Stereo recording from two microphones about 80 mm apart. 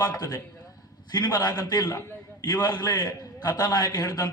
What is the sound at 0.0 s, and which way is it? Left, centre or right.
A man's voice, left.